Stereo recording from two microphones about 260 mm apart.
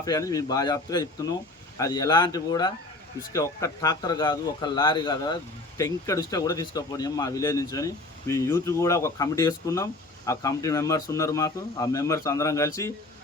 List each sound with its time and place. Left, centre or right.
0.0 s speech: centre